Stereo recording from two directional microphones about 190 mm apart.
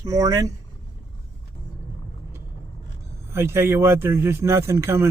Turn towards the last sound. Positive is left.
turn(degrees=-15)  # may be behind; listen again after turning